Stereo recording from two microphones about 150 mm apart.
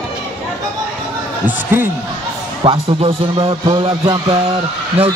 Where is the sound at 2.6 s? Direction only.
40° right (ahead or behind).